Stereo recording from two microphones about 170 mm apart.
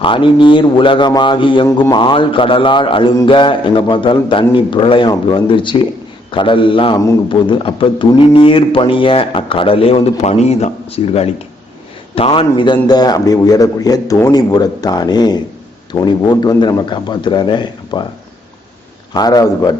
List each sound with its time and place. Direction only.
0.0 s a man's voice: 30° left (ahead or behind)
19.1 s a man's voice: 20° left (ahead or behind)